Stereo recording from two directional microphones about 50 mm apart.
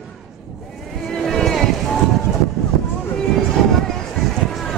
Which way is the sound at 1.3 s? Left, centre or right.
Centre.